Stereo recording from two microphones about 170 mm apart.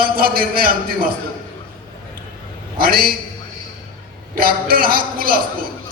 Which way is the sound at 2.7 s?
60° right (ahead or behind).